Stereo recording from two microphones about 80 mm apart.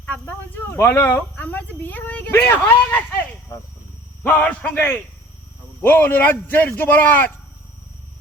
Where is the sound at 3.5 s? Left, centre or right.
Left.